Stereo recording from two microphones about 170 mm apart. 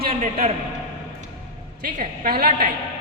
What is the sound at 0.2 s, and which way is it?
Speech, 50° right (ahead or behind).